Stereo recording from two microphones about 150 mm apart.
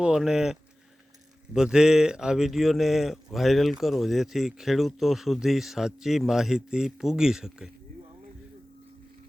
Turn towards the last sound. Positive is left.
turn(degrees=-5)  # may be behind; listen again after turning